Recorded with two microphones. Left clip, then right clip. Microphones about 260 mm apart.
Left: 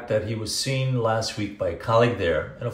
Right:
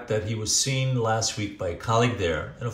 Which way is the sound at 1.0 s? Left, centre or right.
Right.